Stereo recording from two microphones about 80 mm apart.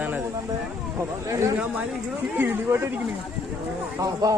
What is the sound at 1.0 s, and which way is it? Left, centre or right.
A man's voice, right.